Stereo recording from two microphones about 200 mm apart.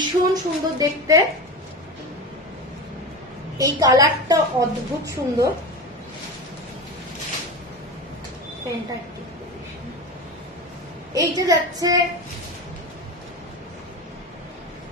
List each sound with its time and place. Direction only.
0.0 s a woman's voice: 20° right (ahead or behind)
3.5 s a woman's voice: 15° right (ahead or behind)
11.1 s a woman's voice: 15° right (ahead or behind)